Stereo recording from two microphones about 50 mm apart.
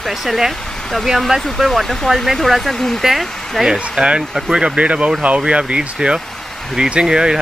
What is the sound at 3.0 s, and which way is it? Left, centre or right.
Speech, centre.